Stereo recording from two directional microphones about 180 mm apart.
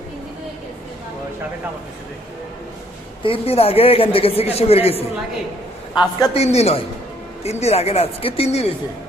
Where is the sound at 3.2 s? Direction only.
30° left (ahead or behind).